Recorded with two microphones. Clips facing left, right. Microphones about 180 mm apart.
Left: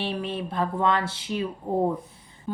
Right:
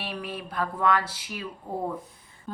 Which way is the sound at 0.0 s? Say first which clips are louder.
Left 6 dB; 25° left (ahead or behind).